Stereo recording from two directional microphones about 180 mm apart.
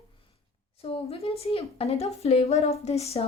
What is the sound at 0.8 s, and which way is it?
A woman's voice, 35° left (ahead or behind).